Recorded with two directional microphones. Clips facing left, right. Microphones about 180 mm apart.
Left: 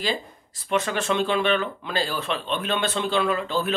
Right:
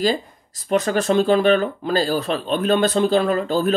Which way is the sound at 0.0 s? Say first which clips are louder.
Right 7 dB; 40° right (ahead or behind).